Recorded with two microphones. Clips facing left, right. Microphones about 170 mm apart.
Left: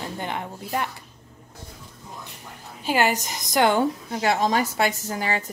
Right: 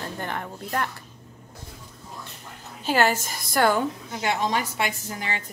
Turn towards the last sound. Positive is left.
turn(degrees=40)  # may be behind; listen again after turning